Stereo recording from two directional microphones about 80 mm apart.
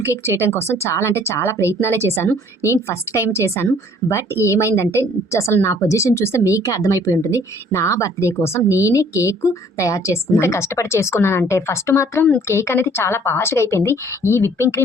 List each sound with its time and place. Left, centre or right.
0.0 s speech: left